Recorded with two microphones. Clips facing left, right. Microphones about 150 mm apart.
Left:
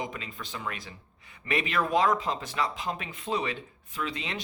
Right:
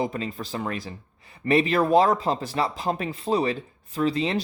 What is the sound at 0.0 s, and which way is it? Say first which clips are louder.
Speech: right 9 dB; 35° right (ahead or behind).